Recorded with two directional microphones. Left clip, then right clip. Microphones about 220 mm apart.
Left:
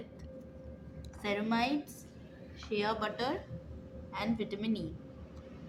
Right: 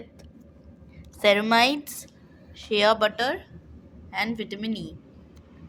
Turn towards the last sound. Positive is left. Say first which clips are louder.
# right 4 dB
turn(degrees=-35)  # may be behind; listen again after turning